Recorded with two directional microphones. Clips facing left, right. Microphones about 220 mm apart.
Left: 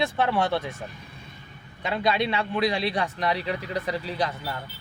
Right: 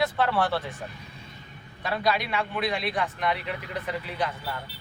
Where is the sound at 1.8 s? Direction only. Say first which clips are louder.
Left 2 dB; 25° left (ahead or behind).